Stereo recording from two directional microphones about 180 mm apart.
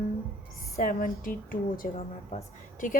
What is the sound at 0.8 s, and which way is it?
Speech, 55° left (ahead or behind).